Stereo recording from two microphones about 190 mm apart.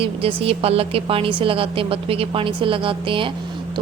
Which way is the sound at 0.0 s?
30° right (ahead or behind).